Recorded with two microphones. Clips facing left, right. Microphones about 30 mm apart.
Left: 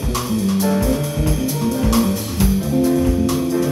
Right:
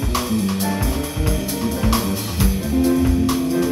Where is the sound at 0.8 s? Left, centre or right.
Centre.